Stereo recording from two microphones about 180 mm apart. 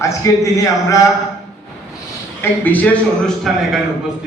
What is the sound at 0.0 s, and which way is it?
Speech, 15° left (ahead or behind).